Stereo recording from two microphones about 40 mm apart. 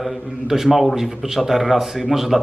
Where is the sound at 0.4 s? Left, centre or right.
Centre.